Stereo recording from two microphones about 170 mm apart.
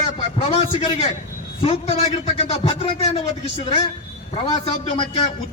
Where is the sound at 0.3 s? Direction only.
30° left (ahead or behind).